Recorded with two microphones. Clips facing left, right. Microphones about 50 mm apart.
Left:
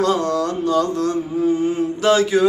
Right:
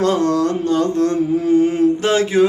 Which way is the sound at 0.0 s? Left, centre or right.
Right.